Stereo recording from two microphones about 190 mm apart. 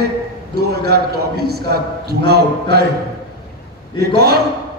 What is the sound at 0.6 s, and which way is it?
Mantra, 55° right (ahead or behind).